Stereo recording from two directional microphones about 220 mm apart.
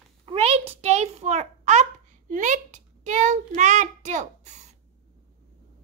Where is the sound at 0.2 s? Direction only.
25° right (ahead or behind).